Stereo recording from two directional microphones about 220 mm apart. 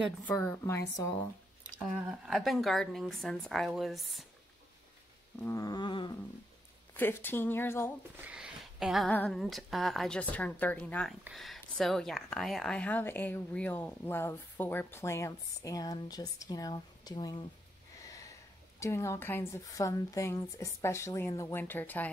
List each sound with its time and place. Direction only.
0.2 s speech: 10° left (ahead or behind)
2.0 s a woman's voice: centre (ahead or behind)
5.4 s a sound: 15° left (ahead or behind)
6.9 s speech: 10° left (ahead or behind)
8.2 s a woman's voice: 5° right (ahead or behind); by 17.5 s 20° left (ahead or behind)
17.9 s a sound: 15° left (ahead or behind)
18.8 s speech: 15° left (ahead or behind)